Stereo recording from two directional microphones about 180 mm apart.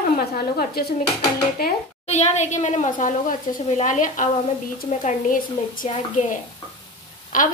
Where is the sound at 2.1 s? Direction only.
40° left (ahead or behind).